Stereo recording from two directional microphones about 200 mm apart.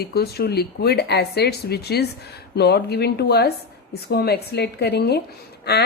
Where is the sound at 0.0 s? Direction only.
50° left (ahead or behind).